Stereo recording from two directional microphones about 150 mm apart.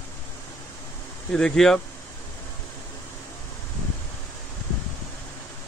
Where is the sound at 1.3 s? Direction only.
5° left (ahead or behind).